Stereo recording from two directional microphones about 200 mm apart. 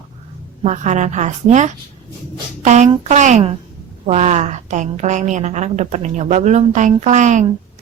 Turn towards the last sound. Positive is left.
turn(degrees=-35)  # may be behind; listen again after turning